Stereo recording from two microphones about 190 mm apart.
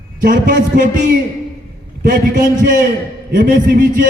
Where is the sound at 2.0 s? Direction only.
45° right (ahead or behind).